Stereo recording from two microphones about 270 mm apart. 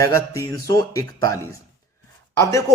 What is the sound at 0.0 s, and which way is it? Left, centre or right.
A man's voice, centre.